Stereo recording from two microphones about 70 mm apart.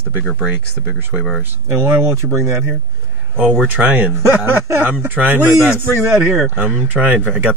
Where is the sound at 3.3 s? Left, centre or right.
Right.